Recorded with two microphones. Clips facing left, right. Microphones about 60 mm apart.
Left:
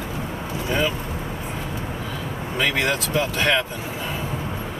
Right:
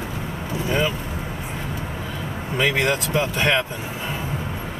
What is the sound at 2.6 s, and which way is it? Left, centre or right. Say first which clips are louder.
Speech: right 2 dB; centre.